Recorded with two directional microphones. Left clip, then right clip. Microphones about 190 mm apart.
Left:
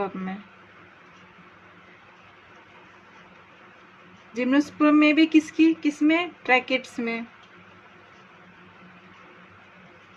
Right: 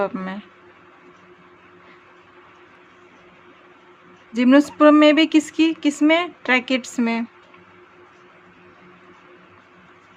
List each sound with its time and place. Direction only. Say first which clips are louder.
0.0 s speech: right 6 dB; 35° right (ahead or behind)
4.3 s speech: right 8 dB; 35° right (ahead or behind)